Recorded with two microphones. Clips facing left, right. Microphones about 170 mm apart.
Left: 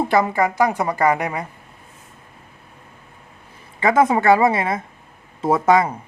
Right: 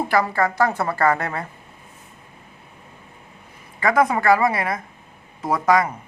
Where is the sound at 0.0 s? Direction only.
20° left (ahead or behind).